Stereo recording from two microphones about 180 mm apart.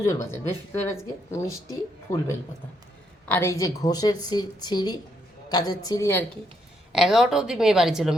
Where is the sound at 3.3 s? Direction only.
15° left (ahead or behind).